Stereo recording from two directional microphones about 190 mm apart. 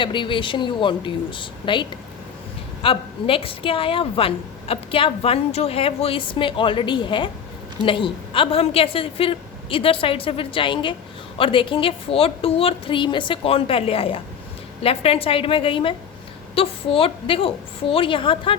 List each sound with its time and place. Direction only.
0.0 s a woman's voice: 25° left (ahead or behind)